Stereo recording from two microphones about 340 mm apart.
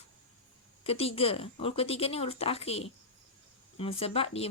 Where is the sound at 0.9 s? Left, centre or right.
Centre.